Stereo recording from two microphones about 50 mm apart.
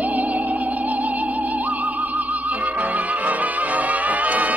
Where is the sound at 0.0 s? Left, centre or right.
Right.